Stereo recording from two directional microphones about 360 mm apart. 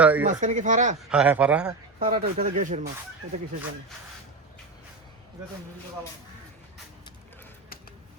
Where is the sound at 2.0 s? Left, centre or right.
Right.